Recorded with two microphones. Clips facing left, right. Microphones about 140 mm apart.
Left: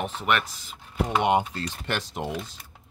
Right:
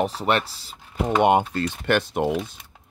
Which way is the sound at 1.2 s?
50° right (ahead or behind).